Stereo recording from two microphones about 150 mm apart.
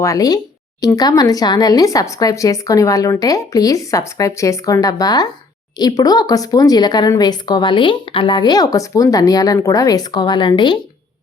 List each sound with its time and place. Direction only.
0.0 s speech: 25° left (ahead or behind)